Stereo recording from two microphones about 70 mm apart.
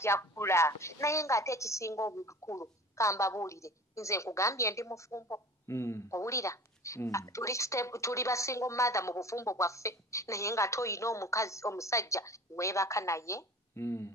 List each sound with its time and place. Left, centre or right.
0.0 s a woman's voice: left